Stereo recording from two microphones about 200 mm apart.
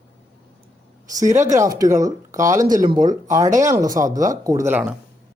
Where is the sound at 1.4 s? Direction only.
15° right (ahead or behind).